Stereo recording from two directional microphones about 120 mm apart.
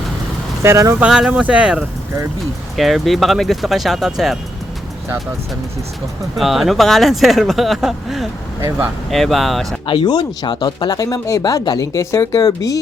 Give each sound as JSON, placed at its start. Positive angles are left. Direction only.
{"t": 0.6, "sound": "speech", "side_deg": -25}
{"t": 0.9, "sound": "speech", "side_deg": -10}
{"t": 6.3, "sound": "speech", "side_deg": 0}
{"t": 9.8, "sound": "speech", "side_deg": 45}